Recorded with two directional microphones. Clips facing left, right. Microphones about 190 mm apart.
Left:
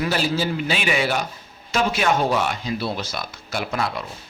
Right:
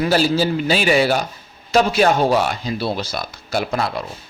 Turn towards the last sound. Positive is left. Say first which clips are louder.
# right 4 dB
turn(degrees=-35)  # may be behind; listen again after turning